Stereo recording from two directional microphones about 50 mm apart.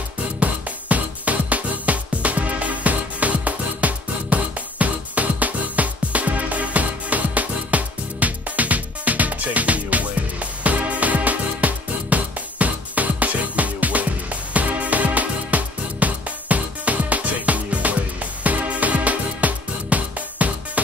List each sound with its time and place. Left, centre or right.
0.4 s music: right